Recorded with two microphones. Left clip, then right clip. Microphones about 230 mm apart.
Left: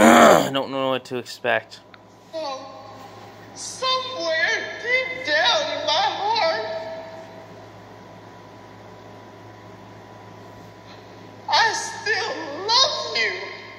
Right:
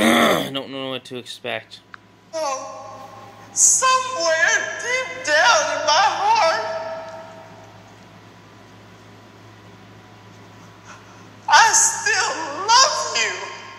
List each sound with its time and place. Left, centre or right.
0.0 s speech: centre
2.3 s music: centre
11.5 s a woman's voice: centre